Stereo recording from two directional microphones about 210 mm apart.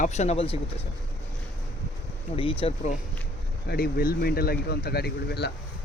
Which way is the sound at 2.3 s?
25° left (ahead or behind).